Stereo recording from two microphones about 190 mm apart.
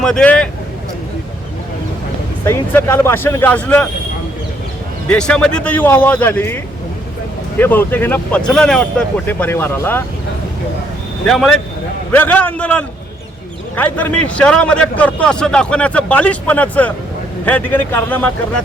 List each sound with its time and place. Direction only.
0.0 s speech: 5° left (ahead or behind)
2.4 s a man's voice: 15° left (ahead or behind)
5.0 s a man's voice: 5° left (ahead or behind)
7.6 s a man's voice: 10° left (ahead or behind)
11.3 s a man's voice: centre (ahead or behind)